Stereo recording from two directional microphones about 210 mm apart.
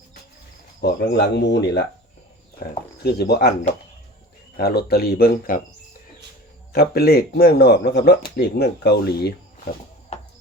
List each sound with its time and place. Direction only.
0.8 s speech: 55° left (ahead or behind)
3.0 s speech: 50° left (ahead or behind)
6.7 s speech: 50° left (ahead or behind)